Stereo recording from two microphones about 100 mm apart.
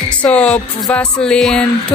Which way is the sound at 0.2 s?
10° left (ahead or behind).